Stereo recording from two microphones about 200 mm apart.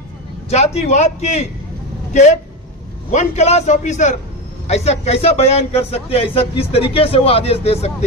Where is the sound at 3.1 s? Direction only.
35° left (ahead or behind).